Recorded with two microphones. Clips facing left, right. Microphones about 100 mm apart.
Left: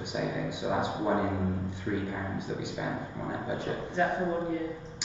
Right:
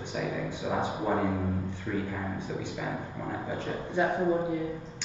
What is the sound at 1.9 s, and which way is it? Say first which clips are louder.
Speech: left 1 dB; 10° left (ahead or behind).